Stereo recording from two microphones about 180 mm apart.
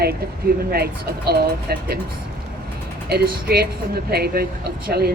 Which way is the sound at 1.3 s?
60° right (ahead or behind).